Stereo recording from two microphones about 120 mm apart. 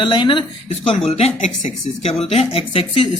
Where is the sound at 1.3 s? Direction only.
90° left.